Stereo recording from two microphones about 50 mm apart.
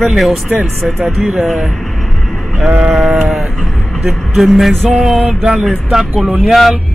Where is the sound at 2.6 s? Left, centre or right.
Right.